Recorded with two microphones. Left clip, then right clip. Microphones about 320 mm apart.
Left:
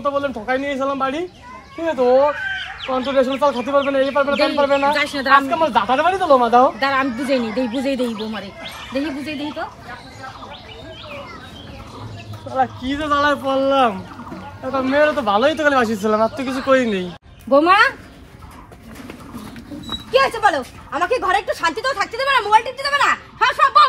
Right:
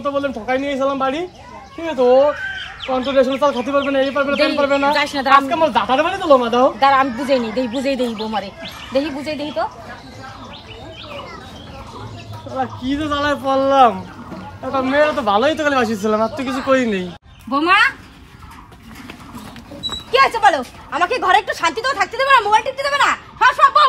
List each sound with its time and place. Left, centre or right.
0.0 s speech: centre
2.0 s speech: centre
3.1 s speech: centre
6.8 s speech: centre
12.5 s speech: centre
20.1 s speech: centre